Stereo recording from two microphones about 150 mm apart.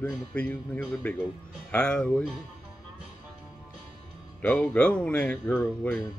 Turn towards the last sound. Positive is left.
turn(degrees=10)  # may be behind; listen again after turning